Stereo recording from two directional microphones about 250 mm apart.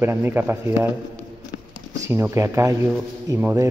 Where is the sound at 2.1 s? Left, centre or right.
Centre.